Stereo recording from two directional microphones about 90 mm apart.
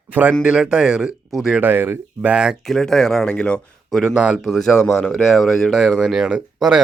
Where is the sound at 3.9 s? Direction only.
5° right (ahead or behind).